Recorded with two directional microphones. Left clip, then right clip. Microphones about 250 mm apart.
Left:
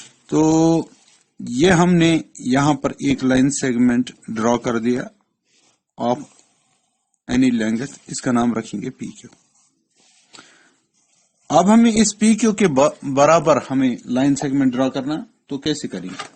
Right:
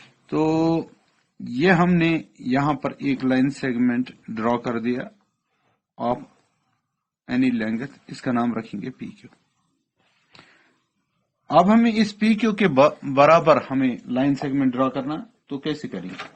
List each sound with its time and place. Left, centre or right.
0.3 s speech: left
7.3 s speech: left
10.3 s a sound: left
11.4 s speech: left